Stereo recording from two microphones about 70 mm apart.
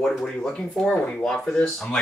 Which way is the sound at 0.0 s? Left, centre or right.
Centre.